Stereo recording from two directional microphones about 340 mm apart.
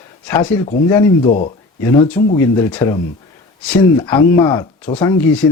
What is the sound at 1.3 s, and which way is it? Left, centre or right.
Speech, left.